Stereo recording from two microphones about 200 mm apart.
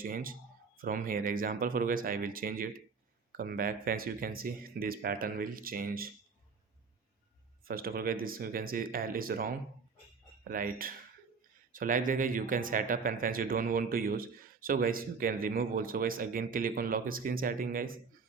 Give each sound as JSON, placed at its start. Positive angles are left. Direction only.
{"t": 0.0, "sound": "speech", "side_deg": -45}
{"t": 7.6, "sound": "speech", "side_deg": -45}
{"t": 10.5, "sound": "speech", "side_deg": -45}